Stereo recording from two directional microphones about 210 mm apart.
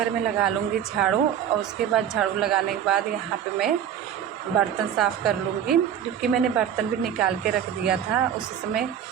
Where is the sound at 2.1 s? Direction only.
5° right (ahead or behind).